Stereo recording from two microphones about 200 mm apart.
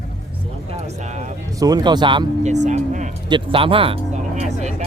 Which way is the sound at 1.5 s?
20° right (ahead or behind).